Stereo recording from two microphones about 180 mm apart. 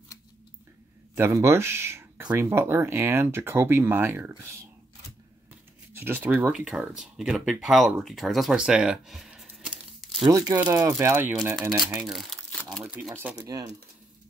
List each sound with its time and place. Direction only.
1.1 s speech: 15° right (ahead or behind)
5.9 s speech: 10° right (ahead or behind)
10.7 s speech: 20° right (ahead or behind)
11.6 s speech: 20° right (ahead or behind)
11.9 s crumpling: centre (ahead or behind)
12.6 s speech: 5° right (ahead or behind)